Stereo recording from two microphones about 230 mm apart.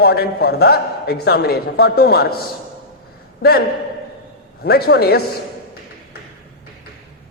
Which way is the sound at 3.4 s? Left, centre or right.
Left.